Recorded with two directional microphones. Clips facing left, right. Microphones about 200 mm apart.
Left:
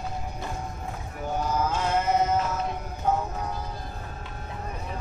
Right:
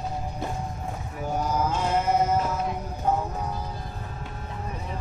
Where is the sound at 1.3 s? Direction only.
10° right (ahead or behind).